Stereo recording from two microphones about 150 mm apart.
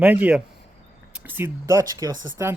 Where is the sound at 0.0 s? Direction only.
10° right (ahead or behind).